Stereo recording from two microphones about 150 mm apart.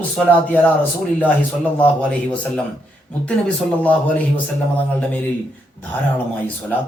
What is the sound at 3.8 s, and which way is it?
Speech, 10° left (ahead or behind).